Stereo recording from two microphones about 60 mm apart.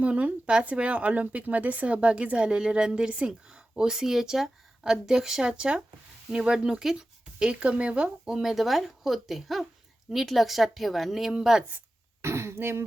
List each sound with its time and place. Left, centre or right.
0.0 s speech: right; by 11.6 s centre
12.2 s speech: right